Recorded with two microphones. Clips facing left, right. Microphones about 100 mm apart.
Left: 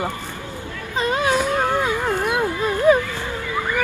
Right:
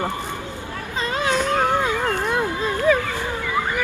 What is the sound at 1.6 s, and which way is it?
Howl, 20° right (ahead or behind).